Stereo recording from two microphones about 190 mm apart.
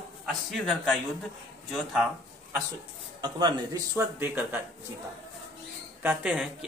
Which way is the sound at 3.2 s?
20° right (ahead or behind).